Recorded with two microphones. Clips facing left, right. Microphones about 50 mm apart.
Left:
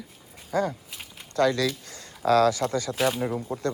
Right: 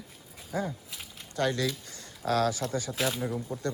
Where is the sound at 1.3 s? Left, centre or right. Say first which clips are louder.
Left 6 dB; left.